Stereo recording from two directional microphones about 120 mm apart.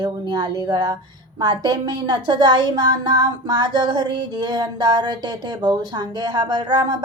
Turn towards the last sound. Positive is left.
turn(degrees=-35)  # may be behind; listen again after turning